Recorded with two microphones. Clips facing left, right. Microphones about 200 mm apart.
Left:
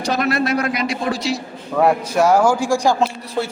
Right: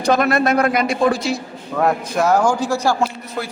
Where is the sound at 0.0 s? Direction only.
50° right (ahead or behind).